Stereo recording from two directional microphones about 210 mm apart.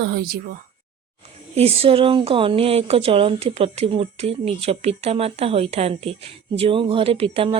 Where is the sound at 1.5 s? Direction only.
30° right (ahead or behind).